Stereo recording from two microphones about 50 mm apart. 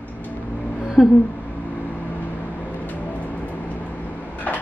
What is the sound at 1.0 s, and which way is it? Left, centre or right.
Speech, centre.